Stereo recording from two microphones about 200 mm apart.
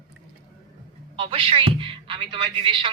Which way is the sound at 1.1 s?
25° right (ahead or behind).